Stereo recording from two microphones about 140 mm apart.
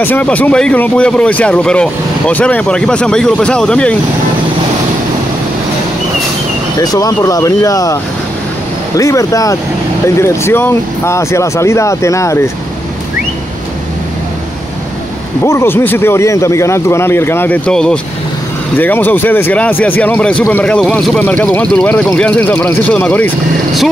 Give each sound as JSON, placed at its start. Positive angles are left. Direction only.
{"t": 0.0, "sound": "speech", "side_deg": 10}
{"t": 6.8, "sound": "speech", "side_deg": 25}
{"t": 15.4, "sound": "speech", "side_deg": 20}
{"t": 17.6, "sound": "speech", "side_deg": 5}